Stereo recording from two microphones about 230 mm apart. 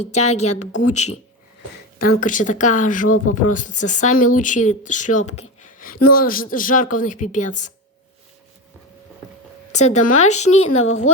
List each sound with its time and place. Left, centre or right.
0.0 s a woman's voice: left
2.0 s speech: left
9.7 s a woman's voice: left
10.5 s speech: left